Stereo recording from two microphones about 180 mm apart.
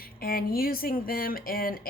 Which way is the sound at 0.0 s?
55° left (ahead or behind).